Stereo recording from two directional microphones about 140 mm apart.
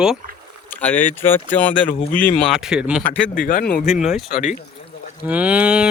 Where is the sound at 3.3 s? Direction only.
80° left.